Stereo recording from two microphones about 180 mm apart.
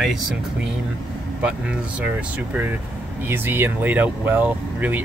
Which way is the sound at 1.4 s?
5° right (ahead or behind).